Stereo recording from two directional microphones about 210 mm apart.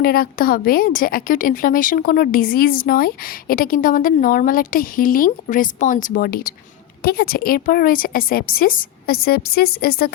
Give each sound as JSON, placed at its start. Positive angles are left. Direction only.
{"t": 0.0, "sound": "a woman's voice", "side_deg": 45}